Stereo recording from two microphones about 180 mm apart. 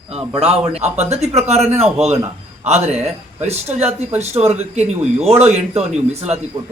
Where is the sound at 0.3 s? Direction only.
35° right (ahead or behind).